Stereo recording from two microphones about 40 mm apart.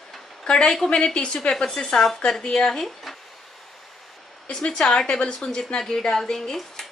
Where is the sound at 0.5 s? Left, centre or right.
Centre.